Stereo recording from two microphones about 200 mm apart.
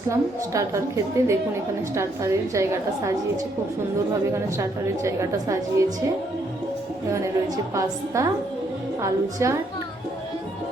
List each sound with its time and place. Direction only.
0.5 s a woman's voice: 15° right (ahead or behind)
5.0 s a woman's voice: 15° right (ahead or behind)
7.1 s a woman's voice: 15° right (ahead or behind)